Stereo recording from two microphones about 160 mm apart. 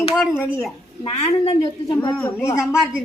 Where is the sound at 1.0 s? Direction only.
40° left (ahead or behind).